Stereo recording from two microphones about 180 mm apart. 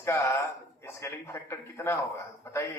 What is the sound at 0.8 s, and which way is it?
A man's voice, 15° left (ahead or behind).